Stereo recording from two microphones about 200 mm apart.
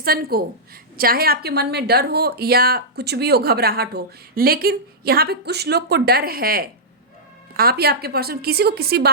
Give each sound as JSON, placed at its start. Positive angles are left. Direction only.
{"t": 0.0, "sound": "a woman's voice", "side_deg": -50}